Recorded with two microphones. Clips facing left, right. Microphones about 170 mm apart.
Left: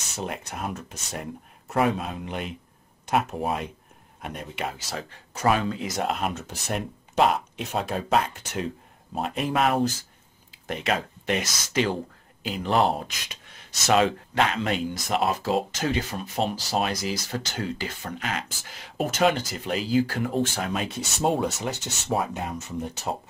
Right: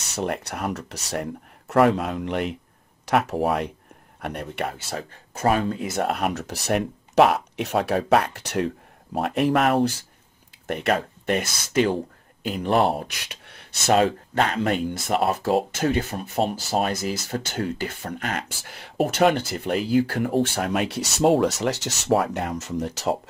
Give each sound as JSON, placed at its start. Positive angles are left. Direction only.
{"t": 0.1, "sound": "speech", "side_deg": -70}
{"t": 4.9, "sound": "speech", "side_deg": -50}
{"t": 13.9, "sound": "speech", "side_deg": -40}